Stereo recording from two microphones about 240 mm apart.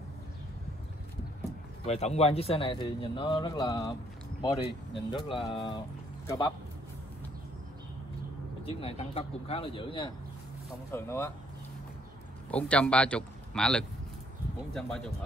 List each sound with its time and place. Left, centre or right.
1.9 s a man's voice: left
8.6 s a man's voice: left
10.9 s speech: centre
12.4 s a man's voice: centre